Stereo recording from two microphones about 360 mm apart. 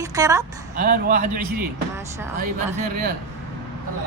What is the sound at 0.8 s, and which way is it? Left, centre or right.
Speech, right.